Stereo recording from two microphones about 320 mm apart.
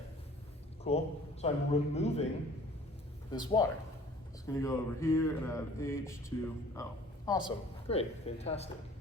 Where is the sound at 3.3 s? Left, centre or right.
Centre.